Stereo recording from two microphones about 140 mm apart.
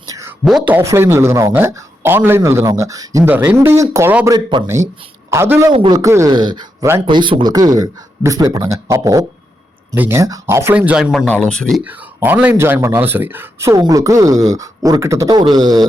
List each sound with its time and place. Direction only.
0.1 s a sound: 20° right (ahead or behind)
0.4 s speech: 5° right (ahead or behind)
4.3 s speech: 30° right (ahead or behind)
4.6 s speech: 20° right (ahead or behind)
5.7 s speech: 30° right (ahead or behind)
6.3 s speech: 30° right (ahead or behind); by 11.8 s 5° left (ahead or behind)
11.8 s speech: 10° right (ahead or behind); by 15.9 s 30° right (ahead or behind)